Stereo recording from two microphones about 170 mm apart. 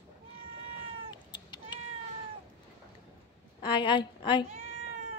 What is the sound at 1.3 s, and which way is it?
Cat, 25° left (ahead or behind).